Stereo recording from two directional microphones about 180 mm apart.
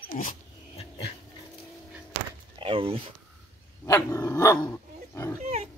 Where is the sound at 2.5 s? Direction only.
30° right (ahead or behind).